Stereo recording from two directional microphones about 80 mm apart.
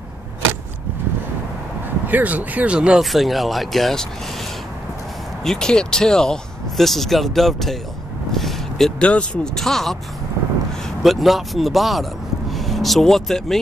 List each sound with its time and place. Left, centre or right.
2.0 s speech: right
3.0 s speech: centre
5.4 s speech: centre
8.3 s a sound: centre
9.0 s speech: centre
11.0 s speech: centre